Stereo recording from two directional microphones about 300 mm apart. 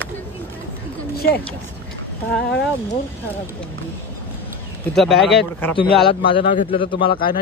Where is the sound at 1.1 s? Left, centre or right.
Left.